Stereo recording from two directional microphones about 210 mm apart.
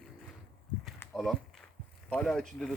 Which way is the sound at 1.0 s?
Centre (ahead or behind).